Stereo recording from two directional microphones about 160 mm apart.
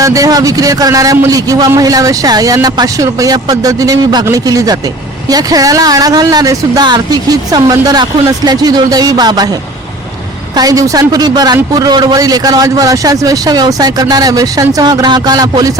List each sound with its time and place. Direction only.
0.0 s a man's voice: 20° right (ahead or behind)
10.5 s a man's voice: 25° right (ahead or behind)